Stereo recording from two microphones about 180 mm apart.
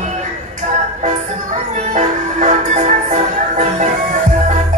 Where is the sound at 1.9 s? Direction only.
45° right (ahead or behind).